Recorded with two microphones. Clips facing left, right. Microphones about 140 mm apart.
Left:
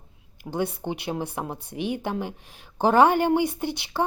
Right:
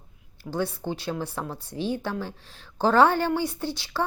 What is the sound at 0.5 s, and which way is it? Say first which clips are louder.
A woman's voice: left 1 dB; 20° left (ahead or behind).